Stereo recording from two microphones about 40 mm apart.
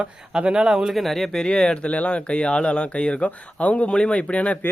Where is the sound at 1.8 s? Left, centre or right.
Left.